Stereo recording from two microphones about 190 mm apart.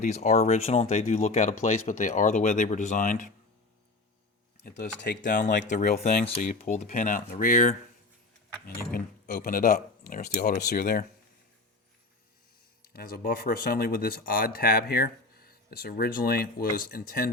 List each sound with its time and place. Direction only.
0.0 s speech: 35° left (ahead or behind)
5.2 s speech: 40° left (ahead or behind)
8.9 s speech: 45° left (ahead or behind)
12.8 s speech: 50° left (ahead or behind)